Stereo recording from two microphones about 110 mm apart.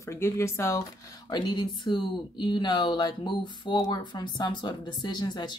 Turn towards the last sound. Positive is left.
turn(degrees=40)  # may be behind; listen again after turning